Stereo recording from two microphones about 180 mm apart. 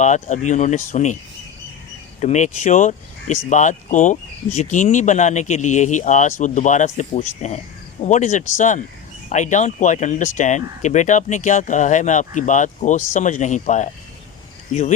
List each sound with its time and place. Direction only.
0.0 s speech: 40° left (ahead or behind)
2.2 s speech: 40° left (ahead or behind)